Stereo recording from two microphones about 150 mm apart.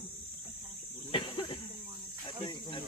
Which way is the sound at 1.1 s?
35° left (ahead or behind).